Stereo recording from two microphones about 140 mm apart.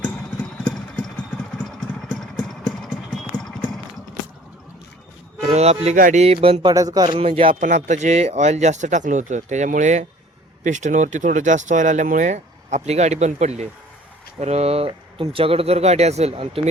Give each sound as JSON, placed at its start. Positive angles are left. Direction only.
{"t": 0.6, "sound": "engine", "side_deg": 5}
{"t": 1.5, "sound": "vehicle", "side_deg": 5}
{"t": 5.4, "sound": "music", "side_deg": -50}
{"t": 6.0, "sound": "speech", "side_deg": -65}
{"t": 6.2, "sound": "speech", "side_deg": -45}
{"t": 7.6, "sound": "speech", "side_deg": -60}